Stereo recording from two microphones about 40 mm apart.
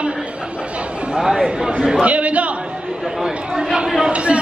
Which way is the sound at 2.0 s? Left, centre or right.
Right.